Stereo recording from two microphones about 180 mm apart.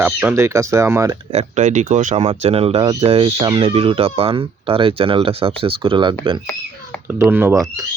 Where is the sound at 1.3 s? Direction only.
40° right (ahead or behind).